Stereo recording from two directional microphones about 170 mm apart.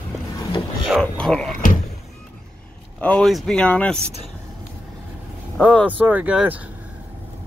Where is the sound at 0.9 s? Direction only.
Centre (ahead or behind).